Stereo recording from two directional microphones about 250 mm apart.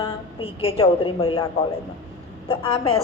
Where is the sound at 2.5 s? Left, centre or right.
Left.